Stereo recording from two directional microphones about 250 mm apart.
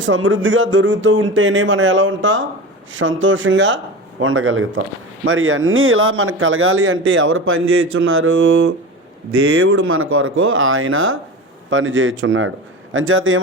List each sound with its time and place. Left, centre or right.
0.0 s speech: right